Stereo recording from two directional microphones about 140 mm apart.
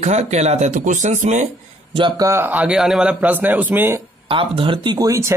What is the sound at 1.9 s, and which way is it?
Speech, 35° right (ahead or behind).